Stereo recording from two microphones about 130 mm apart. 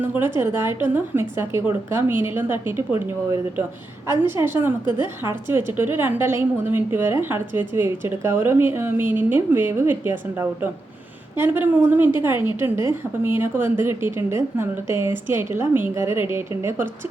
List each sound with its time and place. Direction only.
0.0 s a woman's voice: 15° right (ahead or behind)
4.0 s a woman's voice: 20° right (ahead or behind)